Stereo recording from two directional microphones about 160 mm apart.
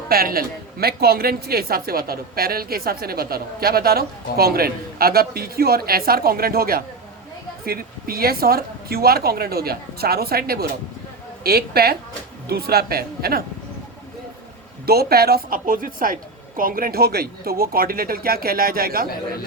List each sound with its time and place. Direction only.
0.1 s a woman's voice: 70° right (ahead or behind)
14.8 s a woman's voice: 75° right (ahead or behind)